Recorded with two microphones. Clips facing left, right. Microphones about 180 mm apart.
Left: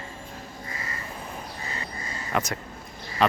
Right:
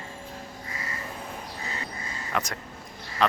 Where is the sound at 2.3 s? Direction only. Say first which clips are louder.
Left 3 dB; 5° left (ahead or behind).